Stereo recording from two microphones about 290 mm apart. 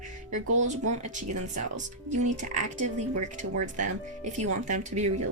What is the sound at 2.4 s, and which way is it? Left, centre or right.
Speech, right.